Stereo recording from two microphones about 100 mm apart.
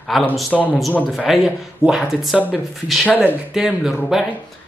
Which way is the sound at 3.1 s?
20° left (ahead or behind).